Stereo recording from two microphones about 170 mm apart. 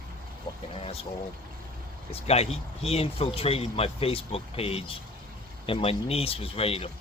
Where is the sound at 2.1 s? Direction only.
40° left (ahead or behind).